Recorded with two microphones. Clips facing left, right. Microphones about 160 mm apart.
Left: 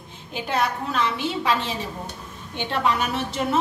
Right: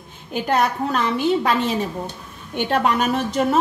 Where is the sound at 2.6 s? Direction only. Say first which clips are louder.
Right 4 dB; 50° right (ahead or behind).